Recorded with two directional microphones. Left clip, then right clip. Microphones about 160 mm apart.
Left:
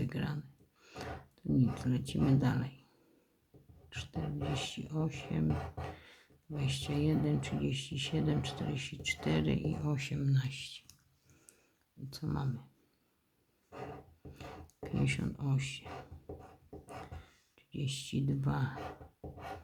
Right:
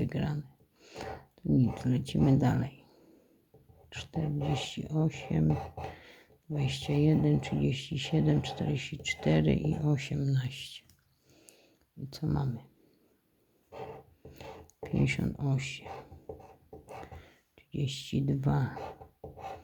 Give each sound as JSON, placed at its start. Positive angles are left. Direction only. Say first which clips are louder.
{"t": 0.0, "sound": "speech", "louder": "right 5 dB", "side_deg": -30}
{"t": 3.8, "sound": "speech", "louder": "right 5 dB", "side_deg": -30}
{"t": 12.1, "sound": "speech", "louder": "right 5 dB", "side_deg": -25}
{"t": 14.8, "sound": "speech", "louder": "right 4 dB", "side_deg": -30}
{"t": 17.2, "sound": "speech", "louder": "right 4 dB", "side_deg": -30}